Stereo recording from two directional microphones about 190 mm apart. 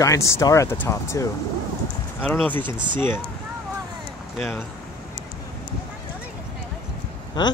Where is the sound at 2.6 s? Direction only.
25° right (ahead or behind).